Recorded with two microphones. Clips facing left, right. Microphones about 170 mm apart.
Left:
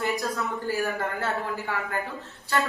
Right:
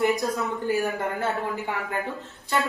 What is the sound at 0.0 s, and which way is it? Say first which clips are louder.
A woman's voice: right 4 dB; 20° right (ahead or behind).